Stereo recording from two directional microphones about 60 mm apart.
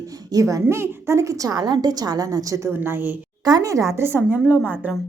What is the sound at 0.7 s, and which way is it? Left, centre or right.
A woman's voice, right.